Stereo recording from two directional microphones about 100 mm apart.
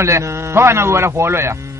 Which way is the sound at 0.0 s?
30° right (ahead or behind).